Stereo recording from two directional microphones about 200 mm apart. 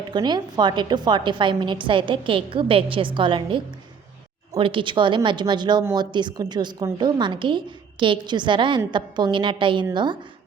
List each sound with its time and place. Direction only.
0.1 s speech: 20° right (ahead or behind)